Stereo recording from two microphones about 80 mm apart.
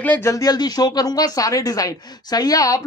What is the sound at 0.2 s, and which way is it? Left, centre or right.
Speech, left.